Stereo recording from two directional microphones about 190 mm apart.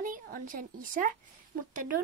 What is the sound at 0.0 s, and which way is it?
A woman's voice, 45° right (ahead or behind).